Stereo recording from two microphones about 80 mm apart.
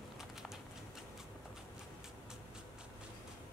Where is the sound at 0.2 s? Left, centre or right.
Centre.